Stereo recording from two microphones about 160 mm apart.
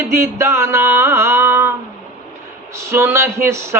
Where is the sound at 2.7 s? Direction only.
15° right (ahead or behind).